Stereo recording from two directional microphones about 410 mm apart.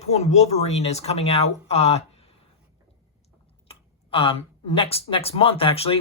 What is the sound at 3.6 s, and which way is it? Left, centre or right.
Speech, centre.